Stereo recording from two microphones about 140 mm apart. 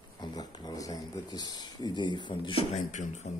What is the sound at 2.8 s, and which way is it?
Speech, 60° left (ahead or behind).